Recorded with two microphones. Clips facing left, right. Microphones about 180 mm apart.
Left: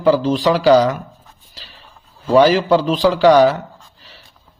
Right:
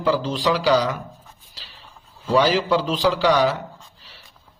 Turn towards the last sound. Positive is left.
turn(degrees=45)  # may be behind; listen again after turning